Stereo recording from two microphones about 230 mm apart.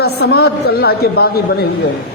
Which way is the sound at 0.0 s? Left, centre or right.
Left.